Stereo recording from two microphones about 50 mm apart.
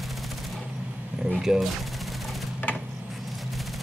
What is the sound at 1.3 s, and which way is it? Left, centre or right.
Speech, centre.